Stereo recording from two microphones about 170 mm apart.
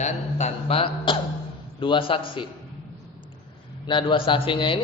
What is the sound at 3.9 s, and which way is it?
Speech, 30° left (ahead or behind).